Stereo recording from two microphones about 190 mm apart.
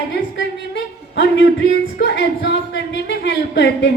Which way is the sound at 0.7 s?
70° left (ahead or behind).